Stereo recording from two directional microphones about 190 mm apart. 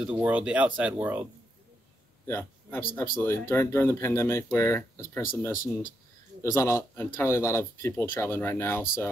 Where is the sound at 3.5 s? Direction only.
15° left (ahead or behind).